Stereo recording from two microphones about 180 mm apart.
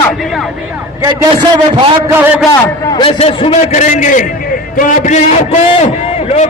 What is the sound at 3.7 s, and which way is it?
A man's voice, 45° left (ahead or behind).